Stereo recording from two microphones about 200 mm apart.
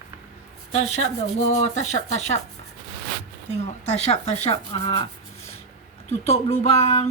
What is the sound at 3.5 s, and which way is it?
Speech, 35° left (ahead or behind).